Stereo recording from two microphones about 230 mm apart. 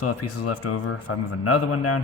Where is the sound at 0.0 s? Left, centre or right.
Left.